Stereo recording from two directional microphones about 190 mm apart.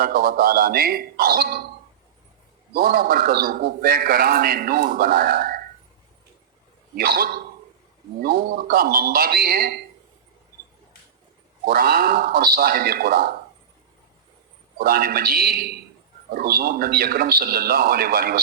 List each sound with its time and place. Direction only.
0.0 s a man's voice: 50° right (ahead or behind)
2.7 s a man's voice: 50° right (ahead or behind)
6.9 s a man's voice: 55° right (ahead or behind)
11.6 s a man's voice: 50° right (ahead or behind)
14.8 s a man's voice: 50° right (ahead or behind)